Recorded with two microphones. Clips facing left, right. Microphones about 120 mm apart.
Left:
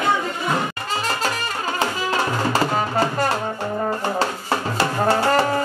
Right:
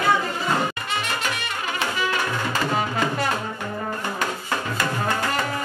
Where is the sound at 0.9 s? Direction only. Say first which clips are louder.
Left 3 dB; 35° left (ahead or behind).